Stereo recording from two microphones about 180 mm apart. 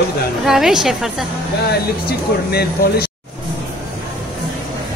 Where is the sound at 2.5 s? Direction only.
60° left (ahead or behind).